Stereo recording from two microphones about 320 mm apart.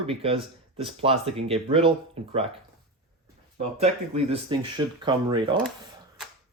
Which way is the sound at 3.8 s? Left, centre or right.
Centre.